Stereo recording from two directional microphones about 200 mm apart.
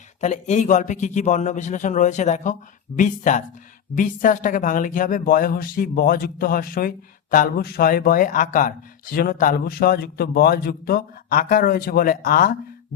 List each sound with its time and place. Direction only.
0.2 s a man's voice: 35° left (ahead or behind)